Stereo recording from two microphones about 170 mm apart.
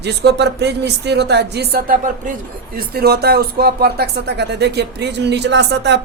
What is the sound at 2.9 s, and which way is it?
Speech, 65° right (ahead or behind).